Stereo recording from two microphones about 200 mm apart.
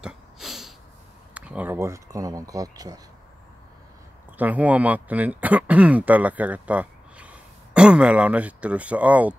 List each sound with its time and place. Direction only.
0.0 s a sound: centre (ahead or behind)
1.3 s speech: 5° right (ahead or behind)
4.4 s speech: 10° right (ahead or behind)